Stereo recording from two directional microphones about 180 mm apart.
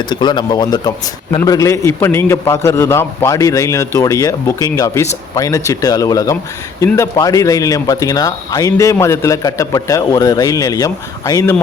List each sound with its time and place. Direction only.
0.1 s a man's voice: 25° left (ahead or behind)